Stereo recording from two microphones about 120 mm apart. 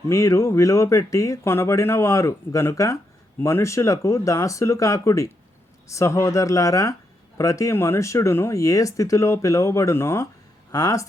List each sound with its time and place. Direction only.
0.1 s speech: 25° left (ahead or behind)